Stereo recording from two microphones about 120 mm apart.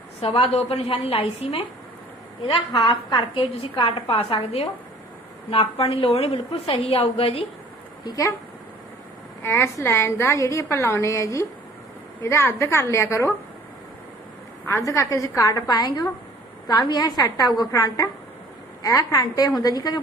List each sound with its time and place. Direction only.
0.2 s a woman's voice: 55° left (ahead or behind)
2.5 s a woman's voice: 45° left (ahead or behind)
8.0 s a woman's voice: 30° left (ahead or behind)
9.4 s a woman's voice: 20° left (ahead or behind)
14.7 s a woman's voice: 25° left (ahead or behind)